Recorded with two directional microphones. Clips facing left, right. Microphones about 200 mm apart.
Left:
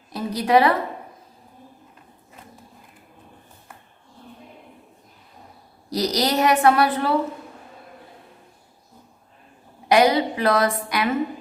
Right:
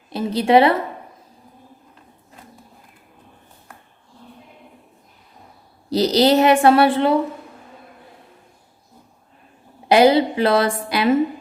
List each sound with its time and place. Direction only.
0.1 s a woman's voice: 25° right (ahead or behind)
5.9 s a woman's voice: 30° right (ahead or behind)
9.9 s a woman's voice: 30° right (ahead or behind)